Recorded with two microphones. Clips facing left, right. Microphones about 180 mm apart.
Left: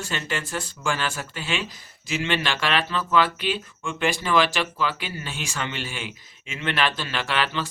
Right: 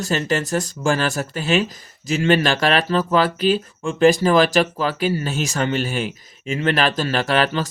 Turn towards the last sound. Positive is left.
turn(degrees=-40)  # may be behind; listen again after turning